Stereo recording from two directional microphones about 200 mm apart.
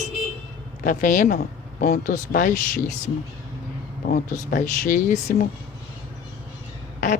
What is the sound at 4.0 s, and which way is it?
A woman's voice, 40° left (ahead or behind).